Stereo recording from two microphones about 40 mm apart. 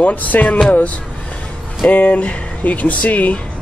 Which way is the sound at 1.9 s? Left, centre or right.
Left.